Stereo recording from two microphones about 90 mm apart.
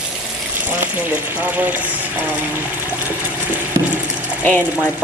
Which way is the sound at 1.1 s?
20° right (ahead or behind).